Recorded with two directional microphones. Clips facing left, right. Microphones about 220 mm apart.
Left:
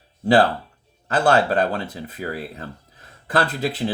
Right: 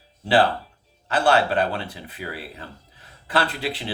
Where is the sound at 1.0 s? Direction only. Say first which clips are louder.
Left 2 dB; 45° left (ahead or behind).